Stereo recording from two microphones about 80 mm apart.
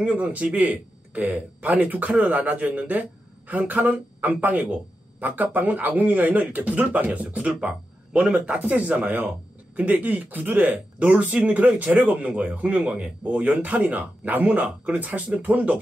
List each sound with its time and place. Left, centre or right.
0.0 s speech: centre